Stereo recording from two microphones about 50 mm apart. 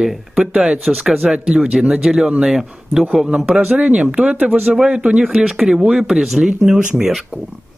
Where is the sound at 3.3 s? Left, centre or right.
Right.